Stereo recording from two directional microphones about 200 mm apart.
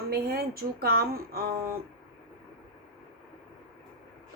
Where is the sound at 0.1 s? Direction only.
50° right (ahead or behind).